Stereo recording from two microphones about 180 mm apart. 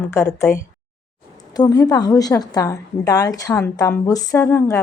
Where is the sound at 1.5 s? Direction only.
20° left (ahead or behind).